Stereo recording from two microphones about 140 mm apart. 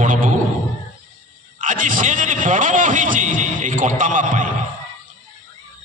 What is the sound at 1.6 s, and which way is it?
A man's voice, 70° right (ahead or behind).